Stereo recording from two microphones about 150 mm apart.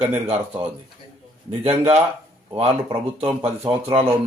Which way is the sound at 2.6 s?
40° right (ahead or behind).